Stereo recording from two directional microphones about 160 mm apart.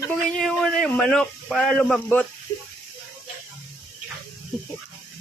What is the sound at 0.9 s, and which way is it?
Speech, 5° left (ahead or behind).